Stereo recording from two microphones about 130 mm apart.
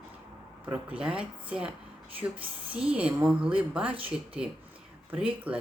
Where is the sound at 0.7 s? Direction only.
10° right (ahead or behind).